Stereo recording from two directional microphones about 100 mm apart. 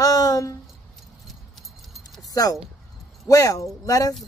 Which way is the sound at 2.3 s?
40° left (ahead or behind).